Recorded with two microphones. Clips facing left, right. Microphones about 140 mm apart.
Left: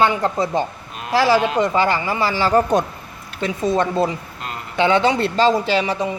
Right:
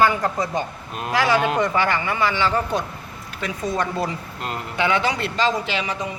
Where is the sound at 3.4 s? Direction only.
25° left (ahead or behind).